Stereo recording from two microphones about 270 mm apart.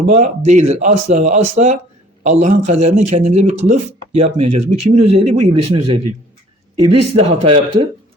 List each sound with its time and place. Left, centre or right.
0.1 s speech: right